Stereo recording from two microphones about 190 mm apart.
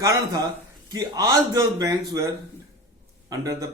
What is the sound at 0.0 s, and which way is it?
A man's voice, 15° right (ahead or behind).